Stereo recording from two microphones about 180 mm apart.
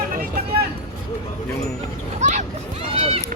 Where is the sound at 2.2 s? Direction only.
40° right (ahead or behind).